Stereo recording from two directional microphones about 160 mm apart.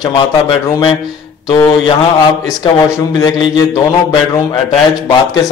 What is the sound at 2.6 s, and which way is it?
A man's voice, 30° left (ahead or behind).